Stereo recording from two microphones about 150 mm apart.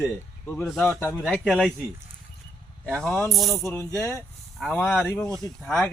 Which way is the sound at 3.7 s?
15° left (ahead or behind).